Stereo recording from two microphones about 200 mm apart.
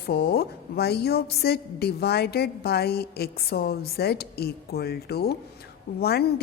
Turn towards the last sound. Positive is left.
turn(degrees=50)  # may be behind; listen again after turning